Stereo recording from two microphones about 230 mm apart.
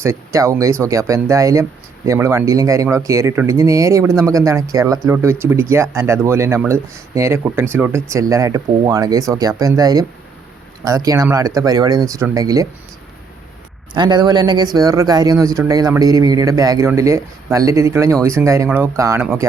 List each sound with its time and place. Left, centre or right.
0.0 s speech: centre
13.9 s speech: centre